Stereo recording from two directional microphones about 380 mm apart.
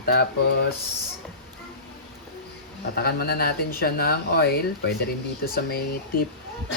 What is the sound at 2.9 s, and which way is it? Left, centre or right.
Speech, left.